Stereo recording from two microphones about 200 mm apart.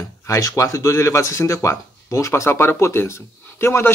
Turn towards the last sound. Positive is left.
turn(degrees=10)  # may be behind; listen again after turning